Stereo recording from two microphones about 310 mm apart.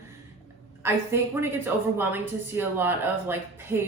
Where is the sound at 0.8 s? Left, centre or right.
Centre.